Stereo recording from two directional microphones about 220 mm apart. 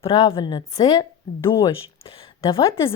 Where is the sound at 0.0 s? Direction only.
25° left (ahead or behind).